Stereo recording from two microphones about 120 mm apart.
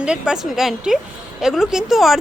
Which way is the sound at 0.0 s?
5° right (ahead or behind).